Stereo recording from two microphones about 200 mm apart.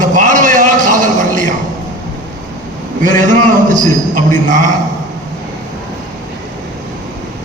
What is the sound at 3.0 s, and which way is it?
A man's voice, 40° right (ahead or behind).